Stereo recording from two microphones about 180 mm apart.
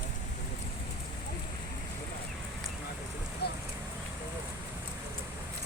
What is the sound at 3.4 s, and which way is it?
Speech, 65° left (ahead or behind).